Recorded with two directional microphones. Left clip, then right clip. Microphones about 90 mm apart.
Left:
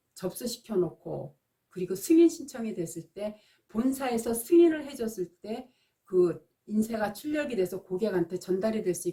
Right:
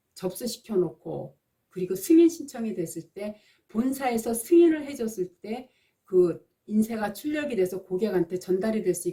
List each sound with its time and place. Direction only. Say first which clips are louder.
0.1 s speech: right 3 dB; 25° right (ahead or behind)